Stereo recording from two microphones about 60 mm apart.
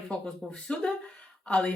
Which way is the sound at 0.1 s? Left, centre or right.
Centre.